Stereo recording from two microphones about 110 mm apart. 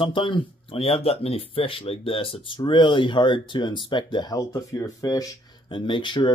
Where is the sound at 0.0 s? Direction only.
50° left (ahead or behind); by 5.3 s 30° left (ahead or behind).